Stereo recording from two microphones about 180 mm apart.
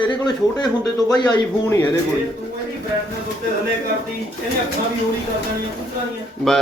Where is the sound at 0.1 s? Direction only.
25° left (ahead or behind).